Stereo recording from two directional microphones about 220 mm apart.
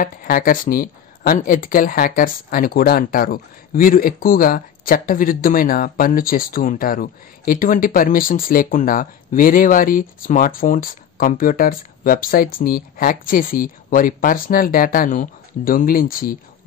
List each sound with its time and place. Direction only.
0.0 s speech: 40° left (ahead or behind)